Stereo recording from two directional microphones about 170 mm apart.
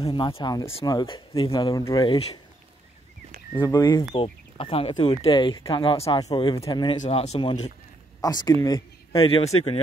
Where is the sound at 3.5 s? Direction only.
20° left (ahead or behind).